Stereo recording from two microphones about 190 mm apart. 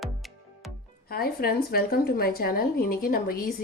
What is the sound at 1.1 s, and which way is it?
A woman's voice, 50° left (ahead or behind).